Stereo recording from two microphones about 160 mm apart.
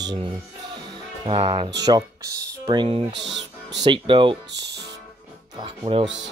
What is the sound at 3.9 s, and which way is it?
Speech, 30° right (ahead or behind).